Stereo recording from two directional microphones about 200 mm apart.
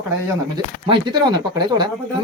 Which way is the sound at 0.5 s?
25° right (ahead or behind).